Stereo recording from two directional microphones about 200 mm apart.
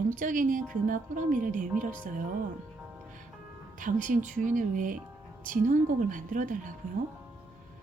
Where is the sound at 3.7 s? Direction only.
40° right (ahead or behind).